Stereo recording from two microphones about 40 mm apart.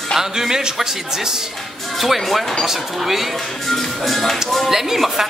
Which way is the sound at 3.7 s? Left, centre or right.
Centre.